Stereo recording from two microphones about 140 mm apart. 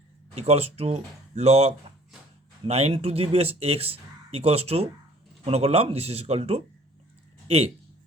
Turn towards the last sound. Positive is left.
turn(degrees=-45)  # may be behind; listen again after turning